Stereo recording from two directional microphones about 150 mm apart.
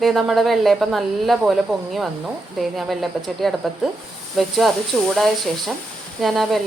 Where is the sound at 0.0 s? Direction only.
Centre (ahead or behind).